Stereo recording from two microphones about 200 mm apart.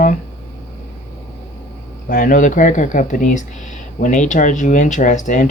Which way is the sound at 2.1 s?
45° left (ahead or behind).